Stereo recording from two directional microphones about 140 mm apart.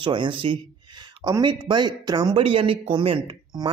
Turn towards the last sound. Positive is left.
turn(degrees=-35)  # may be behind; listen again after turning